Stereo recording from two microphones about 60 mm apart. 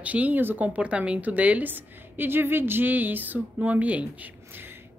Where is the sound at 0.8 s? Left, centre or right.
Centre.